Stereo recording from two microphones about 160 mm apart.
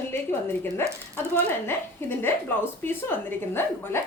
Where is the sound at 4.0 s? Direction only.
15° left (ahead or behind).